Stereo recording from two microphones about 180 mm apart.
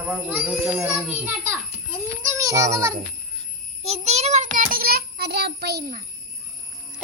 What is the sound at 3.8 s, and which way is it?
Child singing, 35° right (ahead or behind).